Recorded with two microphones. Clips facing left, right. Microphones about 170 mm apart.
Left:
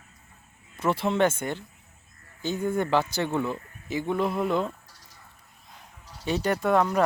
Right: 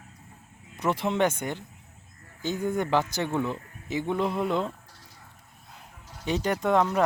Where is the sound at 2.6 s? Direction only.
15° right (ahead or behind).